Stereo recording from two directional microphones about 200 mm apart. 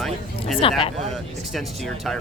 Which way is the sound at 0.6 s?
25° left (ahead or behind).